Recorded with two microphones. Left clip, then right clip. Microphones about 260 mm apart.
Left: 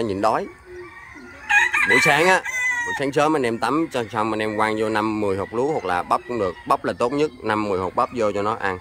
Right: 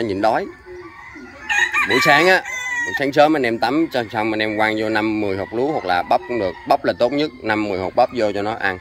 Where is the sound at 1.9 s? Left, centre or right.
Centre.